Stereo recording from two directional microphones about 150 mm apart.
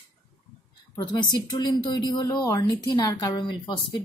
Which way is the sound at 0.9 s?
25° left (ahead or behind).